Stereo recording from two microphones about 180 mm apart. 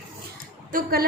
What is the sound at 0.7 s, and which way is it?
Speech, 55° right (ahead or behind).